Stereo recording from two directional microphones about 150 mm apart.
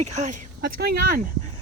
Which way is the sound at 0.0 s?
50° right (ahead or behind).